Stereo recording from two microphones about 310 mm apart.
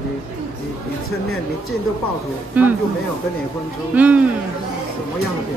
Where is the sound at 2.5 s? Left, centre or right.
Centre.